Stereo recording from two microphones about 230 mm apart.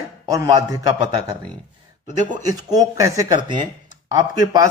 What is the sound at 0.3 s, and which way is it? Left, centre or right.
Speech, centre.